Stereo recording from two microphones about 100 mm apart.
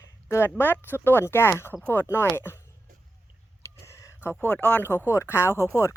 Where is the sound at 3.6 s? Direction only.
30° left (ahead or behind).